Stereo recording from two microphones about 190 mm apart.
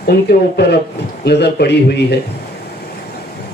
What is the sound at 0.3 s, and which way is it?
A man's voice, 60° left (ahead or behind).